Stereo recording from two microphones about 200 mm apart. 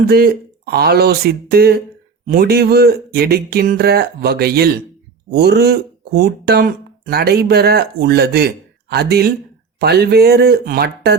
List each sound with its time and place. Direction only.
0.0 s speech: 45° right (ahead or behind)